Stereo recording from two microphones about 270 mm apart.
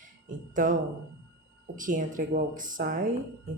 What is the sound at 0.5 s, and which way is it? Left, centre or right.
Speech, right.